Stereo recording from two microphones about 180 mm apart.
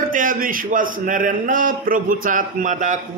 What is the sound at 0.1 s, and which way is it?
A man's voice, 50° right (ahead or behind).